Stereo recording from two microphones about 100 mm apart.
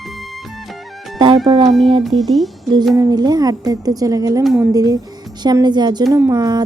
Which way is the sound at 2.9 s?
40° right (ahead or behind).